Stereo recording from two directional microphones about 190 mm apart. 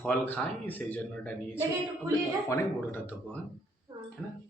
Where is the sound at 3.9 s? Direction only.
20° right (ahead or behind).